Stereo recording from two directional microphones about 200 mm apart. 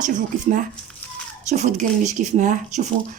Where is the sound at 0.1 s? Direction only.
40° right (ahead or behind).